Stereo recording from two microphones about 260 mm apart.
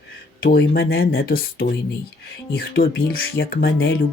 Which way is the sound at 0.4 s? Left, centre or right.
Left.